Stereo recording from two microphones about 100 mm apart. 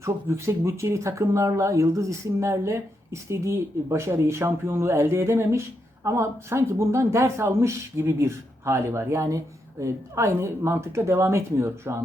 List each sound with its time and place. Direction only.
0.0 s speech: 25° right (ahead or behind)